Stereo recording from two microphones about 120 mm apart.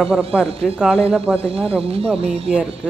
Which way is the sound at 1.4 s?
55° right (ahead or behind).